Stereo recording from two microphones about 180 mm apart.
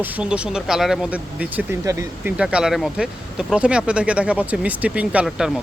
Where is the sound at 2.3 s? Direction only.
5° right (ahead or behind).